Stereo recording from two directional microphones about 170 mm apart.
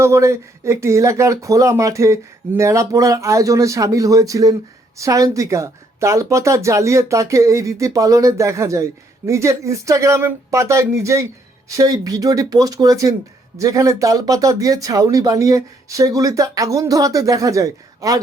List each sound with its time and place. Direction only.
0.0 s speech: 15° right (ahead or behind)